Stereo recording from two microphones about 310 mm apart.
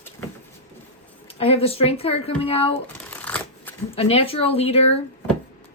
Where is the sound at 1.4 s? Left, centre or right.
Centre.